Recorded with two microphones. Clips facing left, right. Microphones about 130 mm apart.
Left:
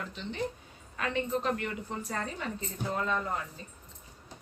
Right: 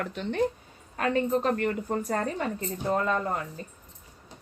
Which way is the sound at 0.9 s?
45° right (ahead or behind).